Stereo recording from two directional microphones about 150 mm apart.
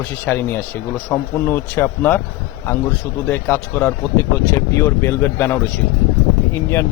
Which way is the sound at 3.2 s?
15° left (ahead or behind).